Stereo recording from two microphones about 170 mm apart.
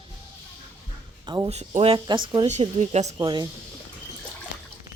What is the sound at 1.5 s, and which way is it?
Speech, 40° right (ahead or behind).